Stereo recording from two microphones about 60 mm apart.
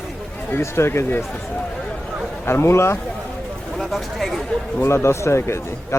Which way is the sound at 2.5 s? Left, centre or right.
Left.